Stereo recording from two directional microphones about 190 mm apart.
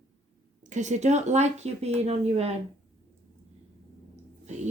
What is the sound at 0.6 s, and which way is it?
Speech, 40° right (ahead or behind).